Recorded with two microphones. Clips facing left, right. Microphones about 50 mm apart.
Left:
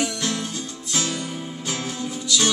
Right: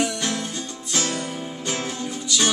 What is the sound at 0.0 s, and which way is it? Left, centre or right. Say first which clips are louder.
Music: right 1 dB; centre.